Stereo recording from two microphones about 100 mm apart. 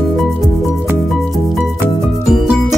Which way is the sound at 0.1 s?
5° left (ahead or behind).